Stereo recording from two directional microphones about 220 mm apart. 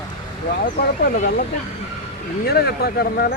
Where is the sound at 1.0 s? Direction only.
40° left (ahead or behind).